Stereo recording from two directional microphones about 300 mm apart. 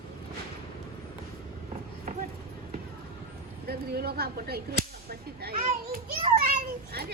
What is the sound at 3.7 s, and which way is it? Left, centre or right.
A child's voice, right.